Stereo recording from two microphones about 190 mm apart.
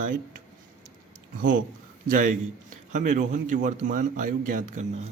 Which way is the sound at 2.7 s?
40° right (ahead or behind).